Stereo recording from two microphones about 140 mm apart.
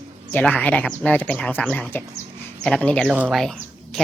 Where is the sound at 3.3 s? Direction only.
5° left (ahead or behind).